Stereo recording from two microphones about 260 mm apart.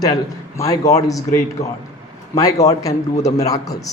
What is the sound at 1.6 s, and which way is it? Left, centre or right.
A man's voice, left.